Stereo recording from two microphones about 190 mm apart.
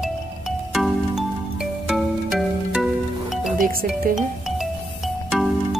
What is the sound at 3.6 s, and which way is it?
Speech, 50° right (ahead or behind).